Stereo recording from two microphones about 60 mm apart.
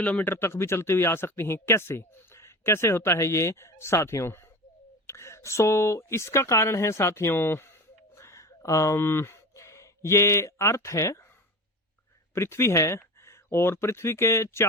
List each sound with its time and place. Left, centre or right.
0.0 s speech: left
9.0 s speech: left
12.3 s speech: left